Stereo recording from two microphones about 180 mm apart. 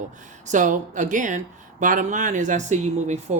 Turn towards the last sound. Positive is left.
turn(degrees=-40)  # may be behind; listen again after turning